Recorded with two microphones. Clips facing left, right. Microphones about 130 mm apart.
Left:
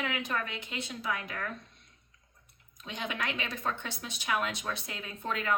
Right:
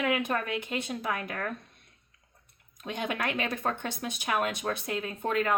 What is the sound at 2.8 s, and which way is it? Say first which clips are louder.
A woman's voice: right 4 dB; 50° right (ahead or behind).